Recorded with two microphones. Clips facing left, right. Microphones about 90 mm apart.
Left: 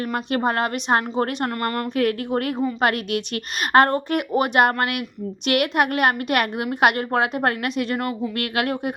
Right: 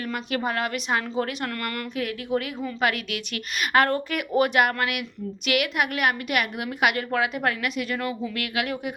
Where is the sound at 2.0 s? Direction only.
50° left (ahead or behind).